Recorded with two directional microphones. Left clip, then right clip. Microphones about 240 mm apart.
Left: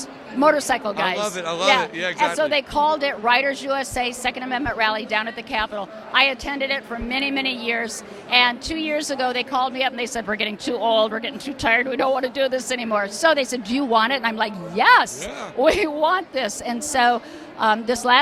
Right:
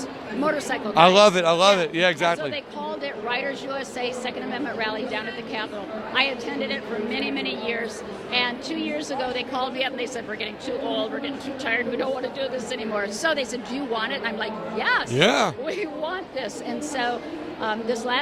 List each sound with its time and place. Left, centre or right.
0.4 s a woman's voice: left
1.1 s speech: right
1.4 s speech: right
2.5 s a woman's voice: left
15.2 s speech: right
15.6 s a woman's voice: left